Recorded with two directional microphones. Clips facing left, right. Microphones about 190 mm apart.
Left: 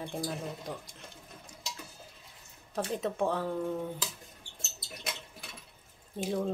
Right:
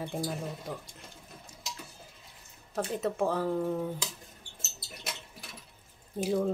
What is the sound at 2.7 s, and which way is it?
Speech, 5° right (ahead or behind).